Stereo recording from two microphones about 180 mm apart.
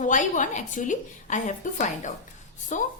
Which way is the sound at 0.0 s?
45° left (ahead or behind).